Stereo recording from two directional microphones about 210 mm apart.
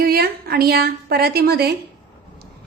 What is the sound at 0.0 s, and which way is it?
A woman's voice, 45° right (ahead or behind).